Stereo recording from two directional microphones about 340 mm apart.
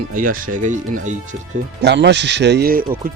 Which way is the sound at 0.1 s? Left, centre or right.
Right.